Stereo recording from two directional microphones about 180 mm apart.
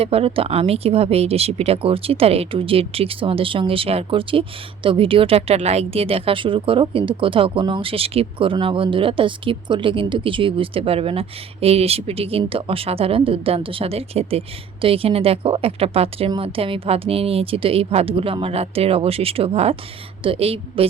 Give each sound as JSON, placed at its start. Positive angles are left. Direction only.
{"t": 0.0, "sound": "speech", "side_deg": -35}